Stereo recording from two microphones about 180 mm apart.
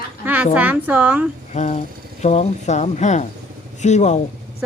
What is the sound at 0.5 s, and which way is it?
Speech, 10° right (ahead or behind).